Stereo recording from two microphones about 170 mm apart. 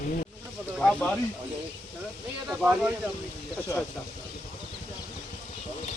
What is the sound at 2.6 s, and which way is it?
Speech, 5° right (ahead or behind).